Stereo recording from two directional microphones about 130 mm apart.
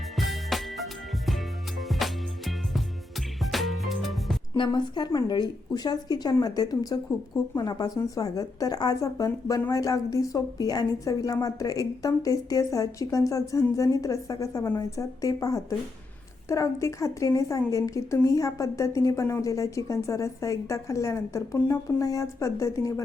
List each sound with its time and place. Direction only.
0.2 s music: centre (ahead or behind)
4.5 s a woman's voice: 35° left (ahead or behind)